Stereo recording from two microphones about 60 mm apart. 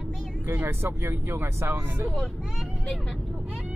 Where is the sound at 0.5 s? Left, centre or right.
Right.